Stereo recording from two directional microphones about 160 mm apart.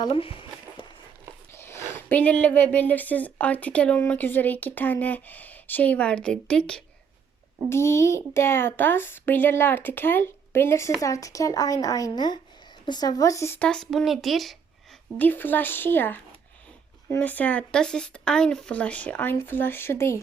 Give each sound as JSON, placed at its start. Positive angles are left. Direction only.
{"t": 0.0, "sound": "speech", "side_deg": 35}
{"t": 1.5, "sound": "a sound", "side_deg": 15}
{"t": 2.0, "sound": "a woman's voice", "side_deg": 10}
{"t": 7.7, "sound": "a woman's voice", "side_deg": 15}
{"t": 15.2, "sound": "a woman's voice", "side_deg": 10}